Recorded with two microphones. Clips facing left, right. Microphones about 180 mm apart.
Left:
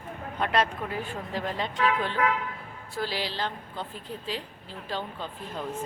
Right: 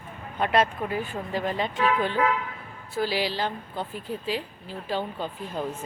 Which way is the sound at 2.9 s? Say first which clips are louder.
Right 5 dB; 5° right (ahead or behind).